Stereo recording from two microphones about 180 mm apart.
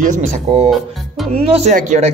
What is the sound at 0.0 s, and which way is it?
Speech, 45° right (ahead or behind).